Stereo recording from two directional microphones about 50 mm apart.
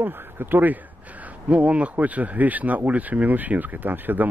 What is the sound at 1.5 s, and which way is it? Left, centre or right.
Speech, right.